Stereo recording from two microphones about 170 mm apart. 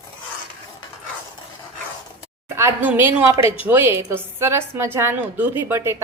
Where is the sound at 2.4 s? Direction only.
15° right (ahead or behind).